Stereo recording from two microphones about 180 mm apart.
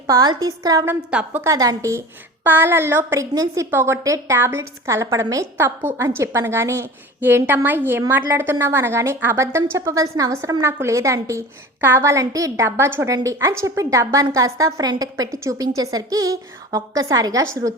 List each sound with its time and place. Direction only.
0.1 s a woman's voice: 20° right (ahead or behind)